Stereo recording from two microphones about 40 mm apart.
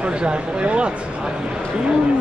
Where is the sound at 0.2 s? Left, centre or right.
Right.